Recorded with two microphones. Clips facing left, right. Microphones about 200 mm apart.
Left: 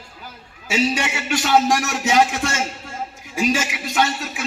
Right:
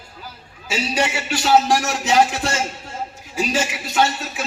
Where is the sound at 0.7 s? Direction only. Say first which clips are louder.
Left 1 dB; 35° right (ahead or behind).